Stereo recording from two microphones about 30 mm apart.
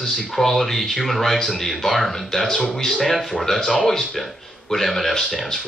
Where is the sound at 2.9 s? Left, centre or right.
Centre.